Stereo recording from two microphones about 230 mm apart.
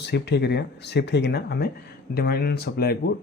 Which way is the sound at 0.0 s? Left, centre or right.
Left.